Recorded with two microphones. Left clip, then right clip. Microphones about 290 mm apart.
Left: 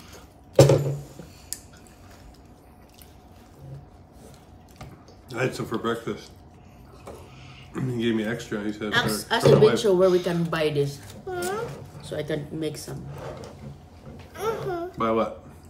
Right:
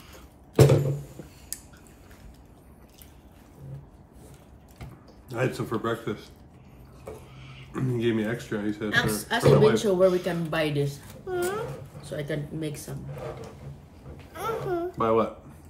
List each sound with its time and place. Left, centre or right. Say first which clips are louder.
5.3 s speech: left 1 dB; centre
7.7 s speech: even; centre
8.9 s speech: left 2 dB; centre
11.2 s a sound: even; centre
12.0 s speech: left 3 dB; centre
14.3 s babbling: left 1 dB; centre